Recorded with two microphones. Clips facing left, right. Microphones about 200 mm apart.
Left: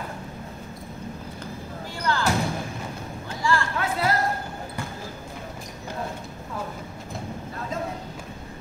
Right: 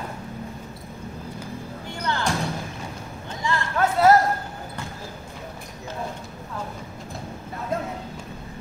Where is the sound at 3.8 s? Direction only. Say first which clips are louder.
Right 8 dB; 45° right (ahead or behind).